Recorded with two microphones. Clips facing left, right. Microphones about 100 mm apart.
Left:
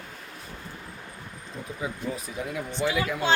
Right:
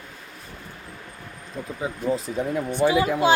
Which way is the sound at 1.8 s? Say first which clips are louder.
Right 7 dB; 30° right (ahead or behind).